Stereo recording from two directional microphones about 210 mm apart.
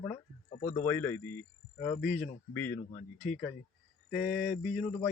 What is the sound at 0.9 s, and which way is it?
Speech, 10° left (ahead or behind).